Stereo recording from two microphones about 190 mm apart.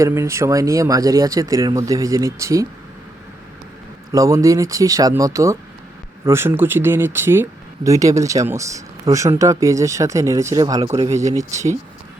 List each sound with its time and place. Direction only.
0.0 s speech: 15° right (ahead or behind)
4.1 s speech: 20° right (ahead or behind)